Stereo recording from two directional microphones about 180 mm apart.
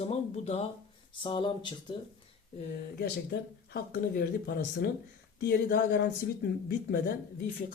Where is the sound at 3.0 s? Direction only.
65° left (ahead or behind).